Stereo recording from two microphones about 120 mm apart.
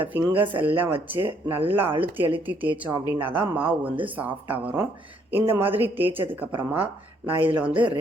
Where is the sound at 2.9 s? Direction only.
35° right (ahead or behind).